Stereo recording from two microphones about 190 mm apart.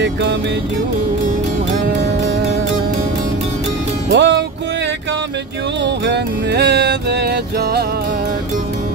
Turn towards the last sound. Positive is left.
turn(degrees=-55)  # may be behind; listen again after turning